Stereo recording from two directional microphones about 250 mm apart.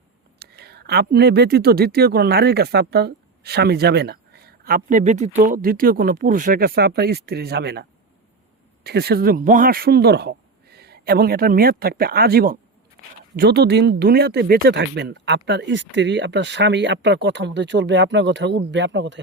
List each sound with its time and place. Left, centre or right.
0.3 s speech: right